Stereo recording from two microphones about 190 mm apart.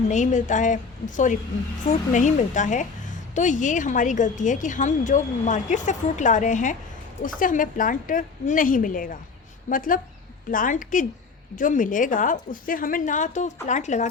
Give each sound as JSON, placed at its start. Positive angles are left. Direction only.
{"t": 0.1, "sound": "a woman's voice", "side_deg": 40}